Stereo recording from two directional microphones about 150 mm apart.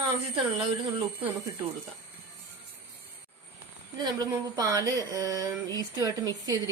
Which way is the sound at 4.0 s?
30° right (ahead or behind).